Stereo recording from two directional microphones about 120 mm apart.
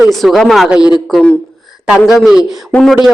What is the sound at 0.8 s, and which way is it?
Speech, 35° left (ahead or behind).